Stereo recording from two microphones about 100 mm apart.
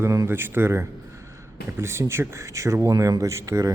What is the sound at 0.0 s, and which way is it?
A man's voice, 30° right (ahead or behind).